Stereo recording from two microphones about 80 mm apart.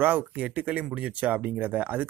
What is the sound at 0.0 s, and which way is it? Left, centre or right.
Speech, right.